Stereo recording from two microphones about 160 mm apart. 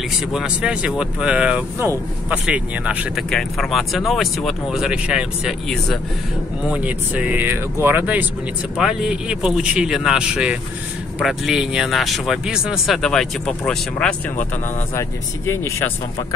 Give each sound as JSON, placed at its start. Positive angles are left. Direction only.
{"t": 0.3, "sound": "speech", "side_deg": -5}
{"t": 15.0, "sound": "speech", "side_deg": 15}